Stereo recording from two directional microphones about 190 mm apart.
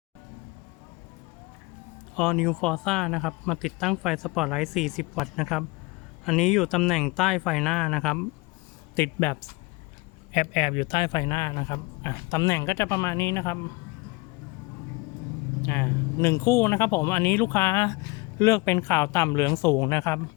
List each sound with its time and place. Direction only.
2.1 s speech: 5° left (ahead or behind)
10.3 s speech: 35° left (ahead or behind); by 13.6 s 15° left (ahead or behind)
15.6 s speech: 10° left (ahead or behind)